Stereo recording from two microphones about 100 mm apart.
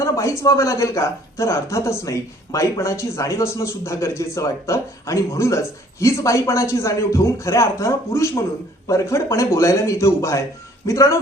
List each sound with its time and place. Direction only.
0.0 s a man's voice: 30° left (ahead or behind)